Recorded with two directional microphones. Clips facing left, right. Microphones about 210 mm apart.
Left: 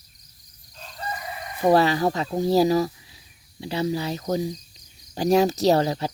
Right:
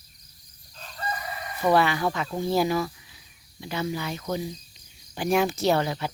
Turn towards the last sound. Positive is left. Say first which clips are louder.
# left 4 dB
turn(degrees=35)  # may be behind; listen again after turning